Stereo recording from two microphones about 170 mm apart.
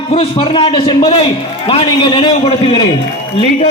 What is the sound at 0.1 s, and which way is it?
A man's voice, 30° left (ahead or behind).